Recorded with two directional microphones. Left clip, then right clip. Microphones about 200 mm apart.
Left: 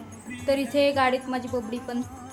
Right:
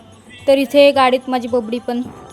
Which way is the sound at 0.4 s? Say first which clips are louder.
Right 12 dB; 40° right (ahead or behind).